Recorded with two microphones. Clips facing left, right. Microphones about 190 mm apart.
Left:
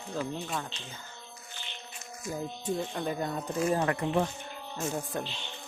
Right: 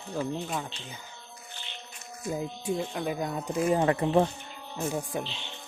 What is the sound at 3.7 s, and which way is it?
Speech, 25° right (ahead or behind).